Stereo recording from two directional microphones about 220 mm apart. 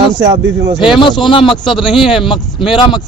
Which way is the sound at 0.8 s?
Centre (ahead or behind).